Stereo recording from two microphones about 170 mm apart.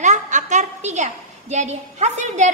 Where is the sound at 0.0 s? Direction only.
45° right (ahead or behind).